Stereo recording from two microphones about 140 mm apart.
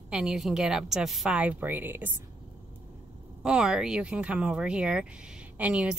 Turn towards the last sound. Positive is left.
turn(degrees=-10)  # may be behind; listen again after turning